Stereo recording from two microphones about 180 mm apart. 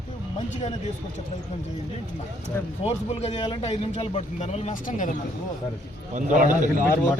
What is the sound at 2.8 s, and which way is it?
A man's voice, 35° left (ahead or behind).